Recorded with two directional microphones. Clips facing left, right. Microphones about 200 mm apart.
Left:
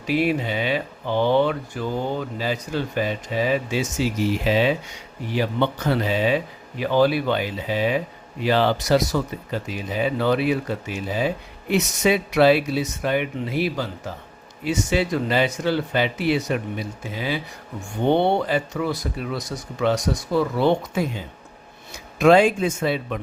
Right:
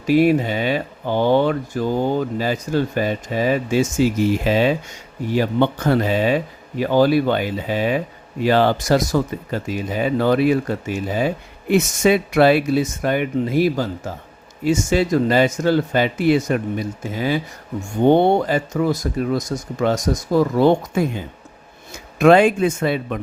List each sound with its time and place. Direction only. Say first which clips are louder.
0.0 s speech: right 7 dB; 45° right (ahead or behind)
22.2 s speech: right 3 dB; 55° right (ahead or behind)